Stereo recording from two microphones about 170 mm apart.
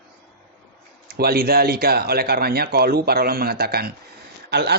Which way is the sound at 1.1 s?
65° right (ahead or behind).